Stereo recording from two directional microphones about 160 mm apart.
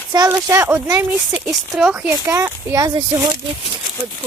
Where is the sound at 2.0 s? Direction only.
15° right (ahead or behind).